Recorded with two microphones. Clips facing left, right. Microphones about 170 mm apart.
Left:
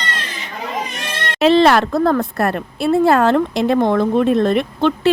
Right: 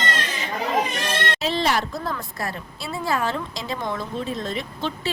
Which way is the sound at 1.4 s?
75° left (ahead or behind).